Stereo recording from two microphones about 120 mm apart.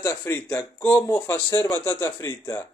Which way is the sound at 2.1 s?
30° left (ahead or behind).